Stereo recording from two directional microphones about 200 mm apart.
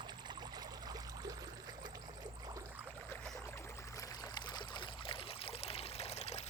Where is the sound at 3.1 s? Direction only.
10° left (ahead or behind).